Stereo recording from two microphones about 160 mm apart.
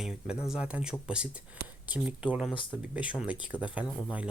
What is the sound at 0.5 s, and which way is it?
Speech, 5° right (ahead or behind).